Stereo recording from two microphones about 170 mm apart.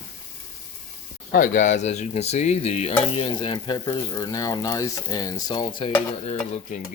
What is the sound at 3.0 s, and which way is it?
Stir, 35° left (ahead or behind).